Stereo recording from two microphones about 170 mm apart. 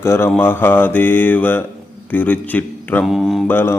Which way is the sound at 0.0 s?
15° left (ahead or behind).